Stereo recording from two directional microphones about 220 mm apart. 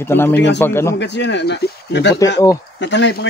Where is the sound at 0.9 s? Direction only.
50° left (ahead or behind).